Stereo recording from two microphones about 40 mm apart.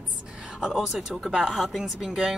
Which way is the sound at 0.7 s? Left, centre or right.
Centre.